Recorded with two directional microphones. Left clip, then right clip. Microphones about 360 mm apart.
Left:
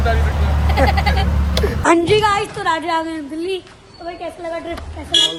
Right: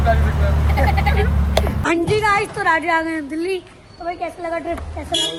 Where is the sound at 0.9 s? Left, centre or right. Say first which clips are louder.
Left 1 dB; centre.